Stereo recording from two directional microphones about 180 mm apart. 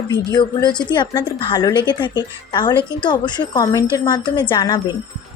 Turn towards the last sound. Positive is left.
turn(degrees=25)  # may be behind; listen again after turning